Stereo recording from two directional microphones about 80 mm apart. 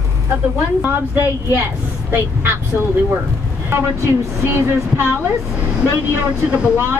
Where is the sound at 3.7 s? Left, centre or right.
Right.